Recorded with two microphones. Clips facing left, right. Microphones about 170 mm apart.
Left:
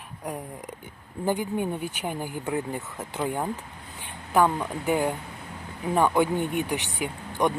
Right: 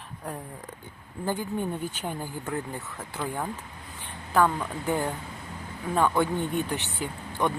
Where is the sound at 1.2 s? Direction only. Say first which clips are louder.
Left 3 dB; 15° left (ahead or behind).